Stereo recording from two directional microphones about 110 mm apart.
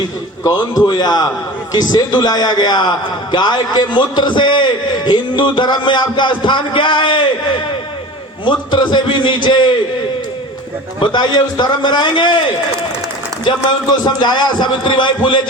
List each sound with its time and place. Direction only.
0.4 s a man's voice: 35° left (ahead or behind)
11.0 s a man's voice: 45° left (ahead or behind)